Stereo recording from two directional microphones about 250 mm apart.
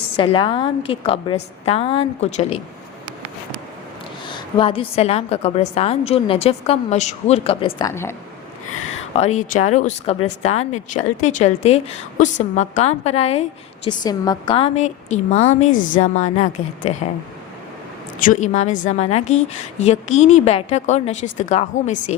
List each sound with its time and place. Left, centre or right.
0.2 s a woman's voice: centre
4.3 s a woman's voice: centre
9.1 s a woman's voice: left
18.2 s a woman's voice: left